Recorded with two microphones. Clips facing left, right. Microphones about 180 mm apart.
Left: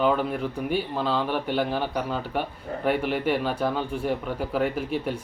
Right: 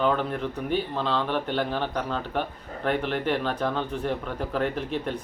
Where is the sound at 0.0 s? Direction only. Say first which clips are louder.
Left 2 dB; 10° left (ahead or behind).